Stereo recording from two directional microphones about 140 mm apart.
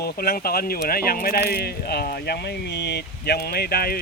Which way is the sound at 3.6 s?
90° left.